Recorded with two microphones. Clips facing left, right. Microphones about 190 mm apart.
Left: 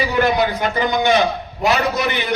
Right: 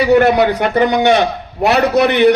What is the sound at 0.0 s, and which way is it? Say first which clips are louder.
A man's voice: right 7 dB; 65° right (ahead or behind).